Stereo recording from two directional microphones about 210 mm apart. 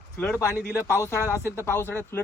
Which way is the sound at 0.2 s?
10° left (ahead or behind).